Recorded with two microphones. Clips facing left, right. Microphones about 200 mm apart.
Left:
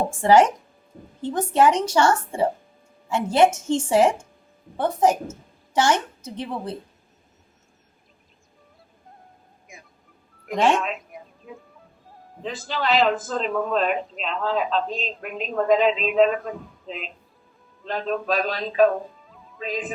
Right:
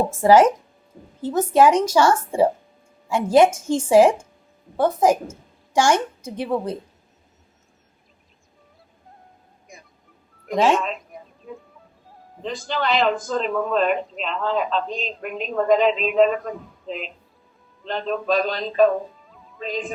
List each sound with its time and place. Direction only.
0.2 s a woman's voice: 5° right (ahead or behind)
10.4 s speech: centre (ahead or behind)
10.8 s a sound: 5° left (ahead or behind)
12.4 s speech: 5° left (ahead or behind)